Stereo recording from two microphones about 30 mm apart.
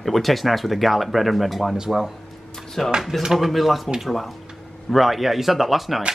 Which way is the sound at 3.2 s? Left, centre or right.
Centre.